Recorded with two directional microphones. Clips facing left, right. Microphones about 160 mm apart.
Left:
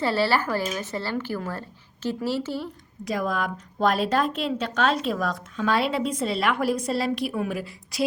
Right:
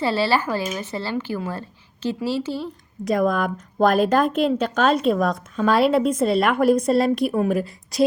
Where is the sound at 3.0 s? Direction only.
50° right (ahead or behind).